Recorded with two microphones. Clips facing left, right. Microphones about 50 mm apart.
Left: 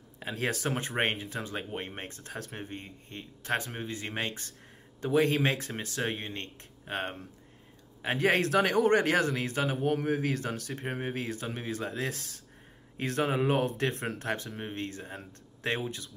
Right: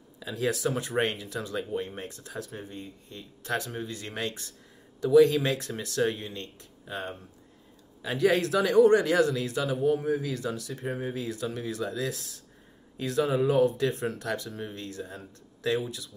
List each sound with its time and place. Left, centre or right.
0.2 s speech: left